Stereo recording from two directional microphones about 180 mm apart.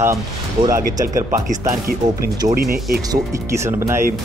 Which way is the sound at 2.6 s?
55° right (ahead or behind).